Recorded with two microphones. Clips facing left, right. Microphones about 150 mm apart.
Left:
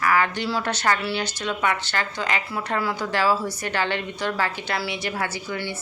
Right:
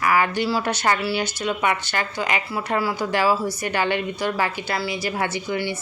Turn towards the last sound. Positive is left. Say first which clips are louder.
# right 4 dB
turn(degrees=-15)  # may be behind; listen again after turning